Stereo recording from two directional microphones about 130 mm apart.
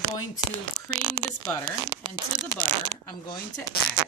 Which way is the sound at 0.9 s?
45° right (ahead or behind).